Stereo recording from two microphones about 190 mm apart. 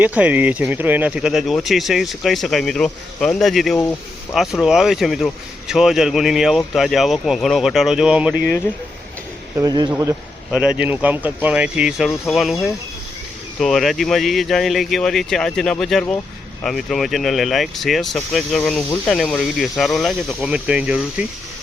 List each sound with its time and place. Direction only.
0.0 s speech: 10° right (ahead or behind)
9.6 s speech: 20° right (ahead or behind)
10.5 s speech: 5° right (ahead or behind)